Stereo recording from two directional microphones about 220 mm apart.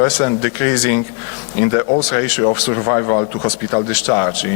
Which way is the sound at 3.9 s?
15° left (ahead or behind).